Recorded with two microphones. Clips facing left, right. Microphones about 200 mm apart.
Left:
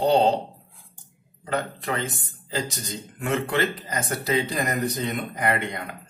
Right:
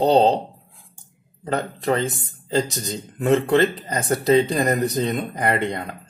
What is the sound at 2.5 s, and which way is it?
Speech, 35° right (ahead or behind).